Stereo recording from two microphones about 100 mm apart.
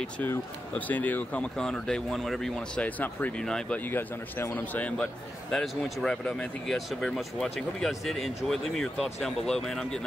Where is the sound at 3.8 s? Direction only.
20° left (ahead or behind).